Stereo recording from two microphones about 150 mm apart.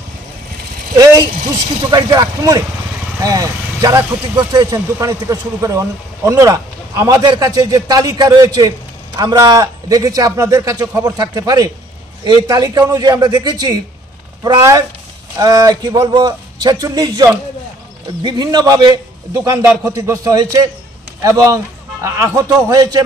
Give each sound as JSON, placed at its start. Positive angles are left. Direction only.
{"t": 0.9, "sound": "speech", "side_deg": -25}